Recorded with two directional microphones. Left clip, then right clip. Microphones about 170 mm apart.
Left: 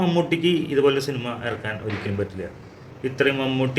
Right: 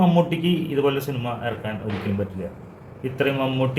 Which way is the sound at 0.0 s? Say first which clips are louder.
Even; 20° right (ahead or behind).